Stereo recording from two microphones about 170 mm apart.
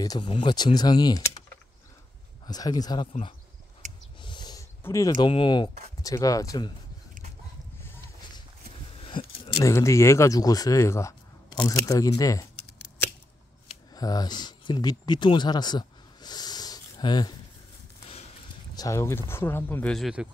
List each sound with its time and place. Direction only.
0.0 s speech: 25° left (ahead or behind)
2.4 s speech: 25° left (ahead or behind)
4.2 s a sound: 25° left (ahead or behind)
5.3 s speech: 30° left (ahead or behind)
9.6 s speech: 15° left (ahead or behind)
13.9 s speech: 20° left (ahead or behind)
18.8 s speech: 15° left (ahead or behind); by 20.3 s 5° right (ahead or behind)